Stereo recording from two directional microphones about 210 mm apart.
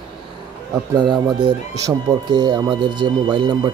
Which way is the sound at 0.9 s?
20° right (ahead or behind).